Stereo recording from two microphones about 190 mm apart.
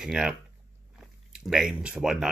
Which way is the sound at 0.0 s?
5° right (ahead or behind).